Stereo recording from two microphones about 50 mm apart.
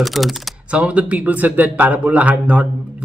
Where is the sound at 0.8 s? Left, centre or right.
Right.